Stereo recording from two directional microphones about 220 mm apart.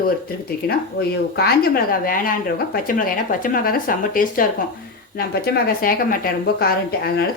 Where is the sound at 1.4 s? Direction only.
40° left (ahead or behind).